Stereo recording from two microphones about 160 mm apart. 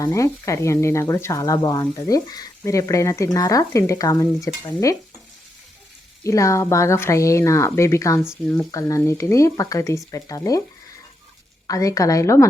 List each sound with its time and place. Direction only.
0.0 s speech: 20° left (ahead or behind)
6.2 s speech: 20° left (ahead or behind)
11.7 s speech: 20° left (ahead or behind)